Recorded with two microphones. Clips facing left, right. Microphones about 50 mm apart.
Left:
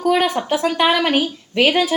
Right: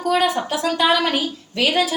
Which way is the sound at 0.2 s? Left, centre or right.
Left.